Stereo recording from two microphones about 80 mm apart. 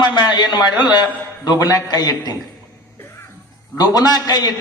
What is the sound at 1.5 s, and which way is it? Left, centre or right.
Speech, left.